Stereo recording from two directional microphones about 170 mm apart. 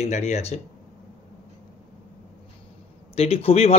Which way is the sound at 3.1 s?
35° left (ahead or behind).